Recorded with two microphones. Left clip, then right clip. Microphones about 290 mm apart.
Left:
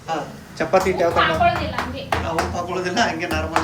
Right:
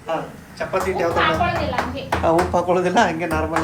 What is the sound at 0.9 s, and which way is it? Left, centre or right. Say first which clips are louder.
Speech: left 1 dB; centre.